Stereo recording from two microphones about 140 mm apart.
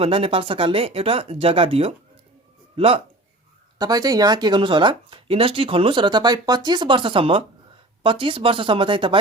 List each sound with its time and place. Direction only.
0.0 s speech: 40° right (ahead or behind)
3.8 s speech: 25° right (ahead or behind)